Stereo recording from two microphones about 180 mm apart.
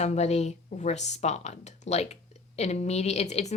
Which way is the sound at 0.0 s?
40° left (ahead or behind).